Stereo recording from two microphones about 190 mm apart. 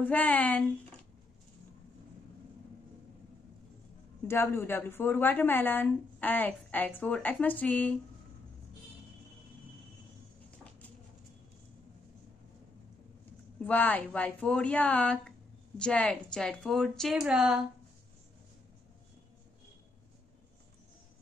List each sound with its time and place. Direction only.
0.0 s a woman's voice: 10° left (ahead or behind)
4.3 s a woman's voice: 10° left (ahead or behind)
13.7 s a woman's voice: 10° left (ahead or behind)